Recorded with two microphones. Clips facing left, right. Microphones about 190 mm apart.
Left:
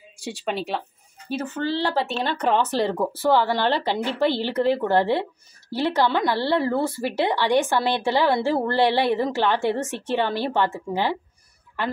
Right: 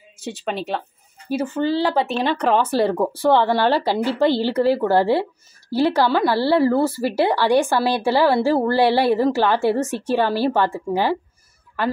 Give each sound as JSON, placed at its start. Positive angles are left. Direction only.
{"t": 0.2, "sound": "speech", "side_deg": 0}
{"t": 1.3, "sound": "a woman's voice", "side_deg": -10}